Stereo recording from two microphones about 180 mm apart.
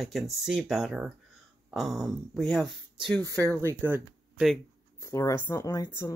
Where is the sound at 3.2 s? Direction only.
20° right (ahead or behind).